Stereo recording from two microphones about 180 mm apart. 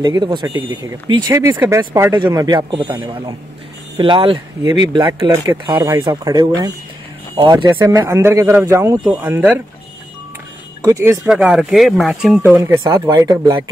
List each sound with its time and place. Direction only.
0.0 s speech: 25° right (ahead or behind)
4.0 s speech: 30° right (ahead or behind); by 9.6 s 10° right (ahead or behind)
10.8 s speech: 15° right (ahead or behind)
11.2 s speech: 5° right (ahead or behind)
12.6 s speech: 15° right (ahead or behind)